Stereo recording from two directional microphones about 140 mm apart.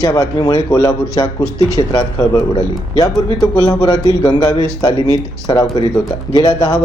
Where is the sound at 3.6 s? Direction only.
30° left (ahead or behind).